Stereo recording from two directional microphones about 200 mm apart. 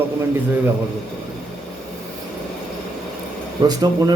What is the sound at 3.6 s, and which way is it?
Speech, 20° right (ahead or behind).